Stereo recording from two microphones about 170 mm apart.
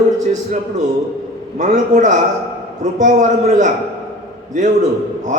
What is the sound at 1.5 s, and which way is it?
A man's voice, 45° right (ahead or behind).